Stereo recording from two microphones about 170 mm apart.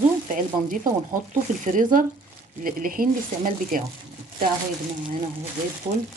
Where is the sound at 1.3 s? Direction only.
50° right (ahead or behind).